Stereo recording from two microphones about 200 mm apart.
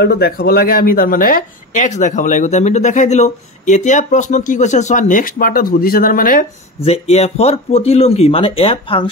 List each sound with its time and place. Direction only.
0.0 s speech: 50° left (ahead or behind)
6.8 s speech: 30° left (ahead or behind)